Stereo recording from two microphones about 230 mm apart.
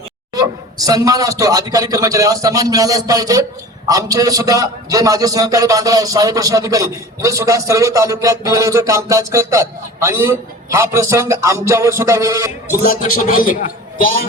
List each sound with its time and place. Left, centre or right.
0.3 s a man's voice: centre
12.8 s a man's voice: left